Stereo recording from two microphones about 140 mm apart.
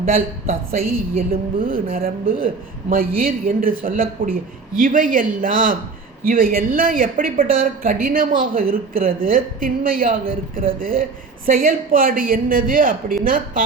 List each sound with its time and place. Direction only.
0.1 s speech: 90° right
4.8 s a man's voice: 75° right (ahead or behind)
6.2 s a woman's voice: 90° right